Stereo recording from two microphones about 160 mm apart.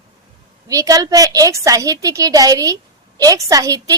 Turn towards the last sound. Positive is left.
turn(degrees=-20)  # may be behind; listen again after turning